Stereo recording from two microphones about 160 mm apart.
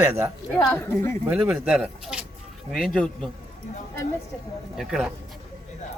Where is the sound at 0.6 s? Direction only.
20° left (ahead or behind).